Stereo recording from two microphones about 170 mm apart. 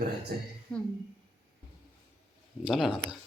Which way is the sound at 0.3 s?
65° right (ahead or behind).